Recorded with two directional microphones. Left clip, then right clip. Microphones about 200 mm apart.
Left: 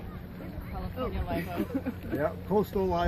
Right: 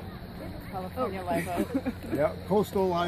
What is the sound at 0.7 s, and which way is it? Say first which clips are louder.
Speech: right 4 dB; 45° right (ahead or behind).